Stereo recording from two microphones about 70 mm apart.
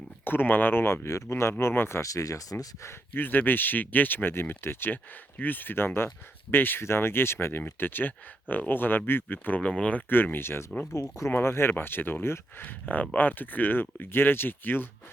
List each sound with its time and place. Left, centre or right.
0.3 s speech: left
2.0 s speech: left
3.2 s speech: left
9.6 s speech: centre
10.3 s speech: left
12.8 s speech: left